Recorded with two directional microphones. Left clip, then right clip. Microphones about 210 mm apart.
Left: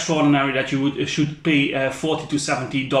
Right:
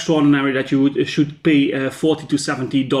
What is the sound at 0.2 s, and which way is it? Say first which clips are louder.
Speech: right 2 dB; 45° right (ahead or behind).